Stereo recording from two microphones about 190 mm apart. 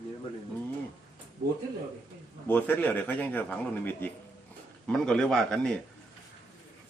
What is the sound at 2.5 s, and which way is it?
A man's voice, 10° left (ahead or behind).